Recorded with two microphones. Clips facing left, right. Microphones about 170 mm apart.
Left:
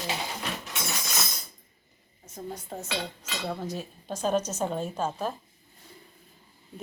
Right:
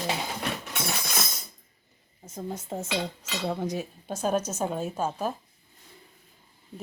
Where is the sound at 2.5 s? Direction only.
25° right (ahead or behind).